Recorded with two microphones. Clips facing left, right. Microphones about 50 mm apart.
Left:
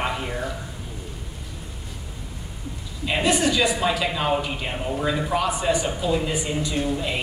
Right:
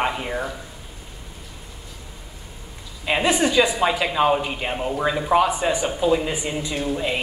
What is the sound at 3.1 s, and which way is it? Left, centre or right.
A man's voice, right.